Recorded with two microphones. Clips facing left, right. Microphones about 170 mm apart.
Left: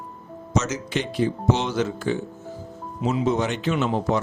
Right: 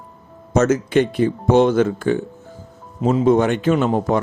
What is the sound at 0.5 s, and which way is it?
Speech, 55° right (ahead or behind).